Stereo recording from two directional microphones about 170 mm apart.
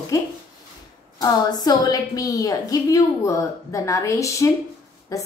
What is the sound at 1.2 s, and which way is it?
A woman's voice, 25° left (ahead or behind).